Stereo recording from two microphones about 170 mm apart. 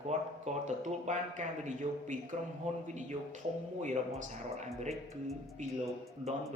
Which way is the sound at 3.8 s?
45° right (ahead or behind).